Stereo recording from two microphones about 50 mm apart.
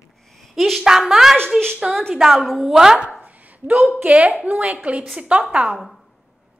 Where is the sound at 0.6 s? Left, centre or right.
Centre.